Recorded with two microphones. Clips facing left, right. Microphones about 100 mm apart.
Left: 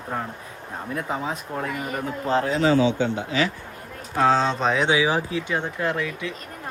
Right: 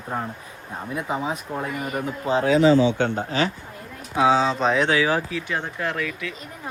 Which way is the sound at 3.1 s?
35° right (ahead or behind).